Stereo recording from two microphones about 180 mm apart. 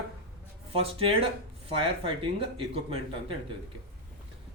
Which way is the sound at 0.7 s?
30° right (ahead or behind).